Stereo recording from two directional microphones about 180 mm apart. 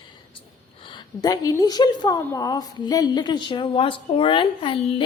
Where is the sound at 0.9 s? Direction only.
25° left (ahead or behind).